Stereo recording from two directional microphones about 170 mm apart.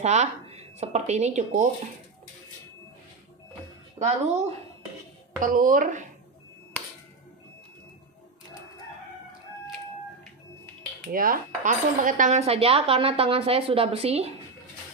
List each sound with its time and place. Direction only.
0.0 s speech: 40° right (ahead or behind)
4.0 s a woman's voice: 40° right (ahead or behind)
11.1 s speech: 55° right (ahead or behind); by 14.3 s 35° right (ahead or behind)